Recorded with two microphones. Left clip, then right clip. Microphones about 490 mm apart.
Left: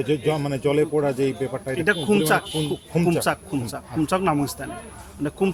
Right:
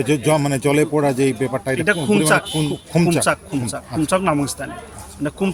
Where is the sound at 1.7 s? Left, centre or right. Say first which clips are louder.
Right 2 dB; left.